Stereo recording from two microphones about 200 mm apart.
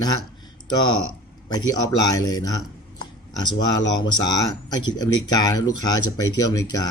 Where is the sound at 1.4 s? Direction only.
20° left (ahead or behind).